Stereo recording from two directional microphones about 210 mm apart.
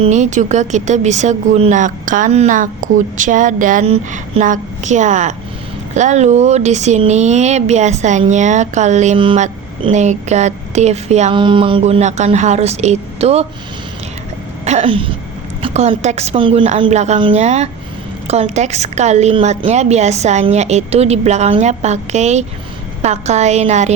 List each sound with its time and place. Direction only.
0.0 s speech: 35° right (ahead or behind)
14.6 s speech: 30° right (ahead or behind)